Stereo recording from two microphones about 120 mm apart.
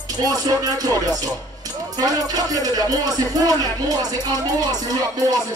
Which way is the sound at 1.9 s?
30° right (ahead or behind).